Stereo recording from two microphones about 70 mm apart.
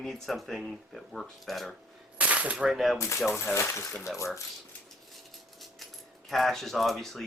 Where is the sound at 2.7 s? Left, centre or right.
Centre.